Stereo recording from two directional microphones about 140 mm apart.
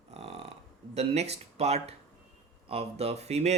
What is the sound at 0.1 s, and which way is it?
Burping, 50° right (ahead or behind).